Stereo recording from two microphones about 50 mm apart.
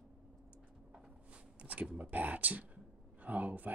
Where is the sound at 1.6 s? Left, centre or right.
Right.